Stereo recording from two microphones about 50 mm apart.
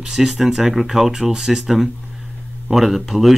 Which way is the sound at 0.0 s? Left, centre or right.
Centre.